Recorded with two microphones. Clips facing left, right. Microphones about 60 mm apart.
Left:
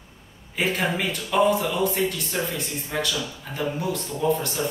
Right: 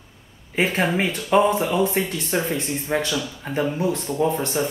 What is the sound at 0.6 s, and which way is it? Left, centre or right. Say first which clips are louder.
Speech: right 4 dB; right.